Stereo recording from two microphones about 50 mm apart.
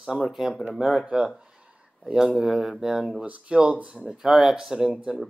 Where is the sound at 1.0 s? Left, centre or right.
Centre.